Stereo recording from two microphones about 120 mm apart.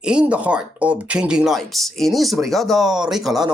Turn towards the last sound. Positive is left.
turn(degrees=0)  # may be behind; listen again after turning